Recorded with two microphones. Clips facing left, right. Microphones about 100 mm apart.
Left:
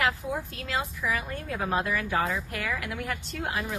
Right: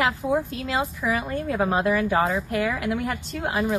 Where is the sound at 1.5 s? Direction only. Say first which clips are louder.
Right 6 dB; 20° right (ahead or behind).